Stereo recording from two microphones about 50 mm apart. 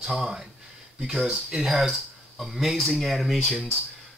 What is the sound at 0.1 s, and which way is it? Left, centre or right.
Speech, centre.